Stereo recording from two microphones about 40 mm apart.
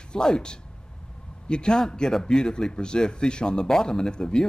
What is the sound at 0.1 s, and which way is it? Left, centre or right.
Speech, centre.